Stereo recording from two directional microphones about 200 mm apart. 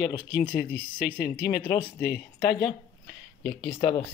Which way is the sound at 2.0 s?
55° left (ahead or behind).